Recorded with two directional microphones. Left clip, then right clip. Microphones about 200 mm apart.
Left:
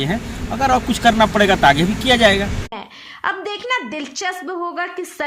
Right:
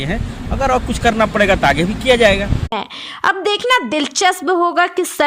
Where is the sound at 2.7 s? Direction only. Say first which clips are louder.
Right 9 dB; 45° right (ahead or behind).